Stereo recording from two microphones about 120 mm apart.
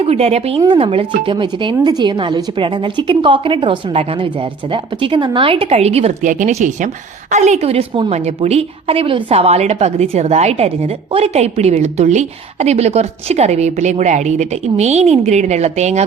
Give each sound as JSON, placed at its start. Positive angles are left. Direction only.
{"t": 0.0, "sound": "a woman's voice", "side_deg": -60}
{"t": 7.7, "sound": "a woman's voice", "side_deg": -50}